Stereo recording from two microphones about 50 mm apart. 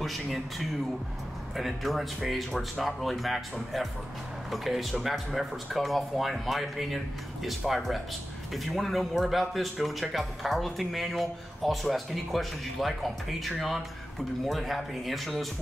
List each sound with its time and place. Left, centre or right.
0.0 s speech: centre
4.5 s speech: centre